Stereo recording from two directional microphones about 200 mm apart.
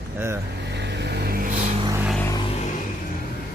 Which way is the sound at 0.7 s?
60° right (ahead or behind).